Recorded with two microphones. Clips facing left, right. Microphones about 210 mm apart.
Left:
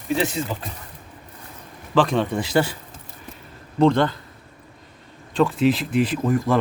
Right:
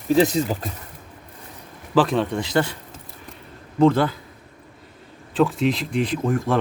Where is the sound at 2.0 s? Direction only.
Centre (ahead or behind).